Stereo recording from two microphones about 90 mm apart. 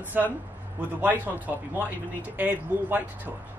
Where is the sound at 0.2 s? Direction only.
20° right (ahead or behind).